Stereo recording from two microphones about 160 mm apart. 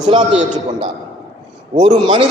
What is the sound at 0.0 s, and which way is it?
Speech, 30° right (ahead or behind).